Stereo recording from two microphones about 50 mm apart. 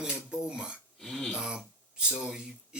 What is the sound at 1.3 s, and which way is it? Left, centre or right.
Speech, centre.